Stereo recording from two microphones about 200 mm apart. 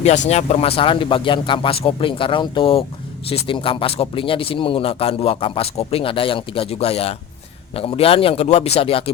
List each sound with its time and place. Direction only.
0.3 s speech: 30° left (ahead or behind)